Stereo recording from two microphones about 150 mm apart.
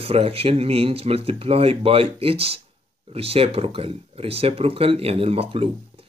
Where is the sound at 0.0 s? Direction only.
40° right (ahead or behind).